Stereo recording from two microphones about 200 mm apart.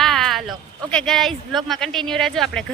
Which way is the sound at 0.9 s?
5° left (ahead or behind).